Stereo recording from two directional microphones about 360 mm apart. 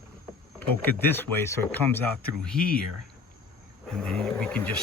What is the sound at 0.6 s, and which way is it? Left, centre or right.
Speech, centre.